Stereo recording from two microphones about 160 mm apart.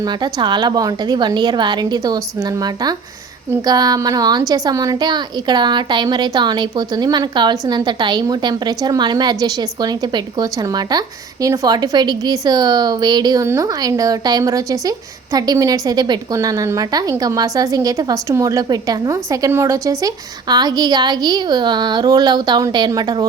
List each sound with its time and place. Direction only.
0.0 s a woman's voice: 25° right (ahead or behind)